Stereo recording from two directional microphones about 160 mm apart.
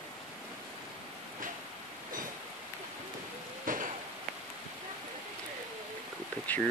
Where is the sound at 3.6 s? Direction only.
55° right (ahead or behind).